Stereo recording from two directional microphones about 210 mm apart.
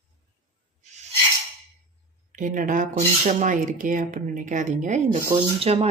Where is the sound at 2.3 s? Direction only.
40° right (ahead or behind).